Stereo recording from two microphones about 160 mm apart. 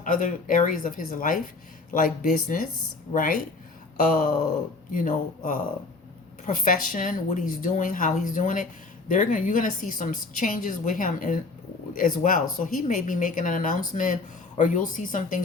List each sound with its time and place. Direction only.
0.0 s speech: 55° left (ahead or behind)
3.9 s speech: 60° left (ahead or behind)